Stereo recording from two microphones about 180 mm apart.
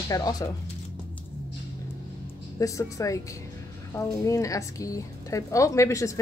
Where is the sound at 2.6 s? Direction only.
20° left (ahead or behind).